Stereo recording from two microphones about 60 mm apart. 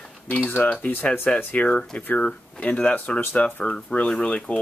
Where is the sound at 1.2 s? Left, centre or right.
Centre.